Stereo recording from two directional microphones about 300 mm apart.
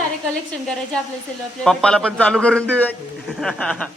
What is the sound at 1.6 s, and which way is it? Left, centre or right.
A man's voice, centre.